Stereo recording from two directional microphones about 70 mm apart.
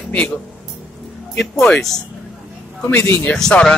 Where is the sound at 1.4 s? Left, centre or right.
Centre.